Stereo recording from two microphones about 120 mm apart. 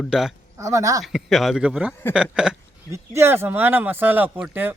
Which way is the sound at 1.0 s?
Centre (ahead or behind).